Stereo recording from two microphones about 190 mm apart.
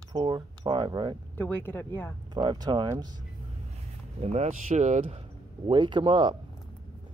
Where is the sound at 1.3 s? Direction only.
10° left (ahead or behind).